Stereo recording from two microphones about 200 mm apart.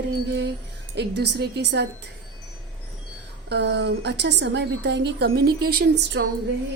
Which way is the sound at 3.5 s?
60° right (ahead or behind).